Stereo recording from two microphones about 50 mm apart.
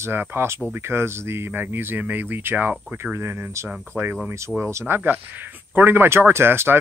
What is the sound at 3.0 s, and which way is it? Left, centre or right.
Speech, right.